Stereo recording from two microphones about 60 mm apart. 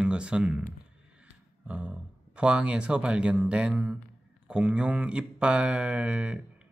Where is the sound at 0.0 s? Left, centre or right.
Centre.